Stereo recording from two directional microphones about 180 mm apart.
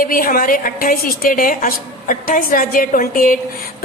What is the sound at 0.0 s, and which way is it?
A woman's voice, 50° left (ahead or behind).